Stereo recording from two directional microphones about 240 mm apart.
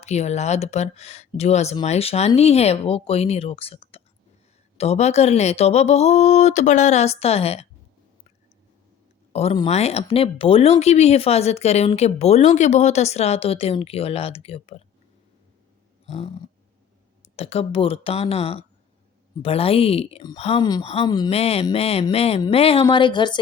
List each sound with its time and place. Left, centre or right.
0.0 s speech: left
9.3 s speech: left
16.0 s purr: left
17.2 s speech: left